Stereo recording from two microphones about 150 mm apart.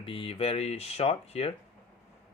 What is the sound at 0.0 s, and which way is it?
Speech, 35° left (ahead or behind).